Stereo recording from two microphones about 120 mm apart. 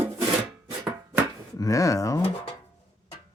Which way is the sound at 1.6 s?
30° left (ahead or behind).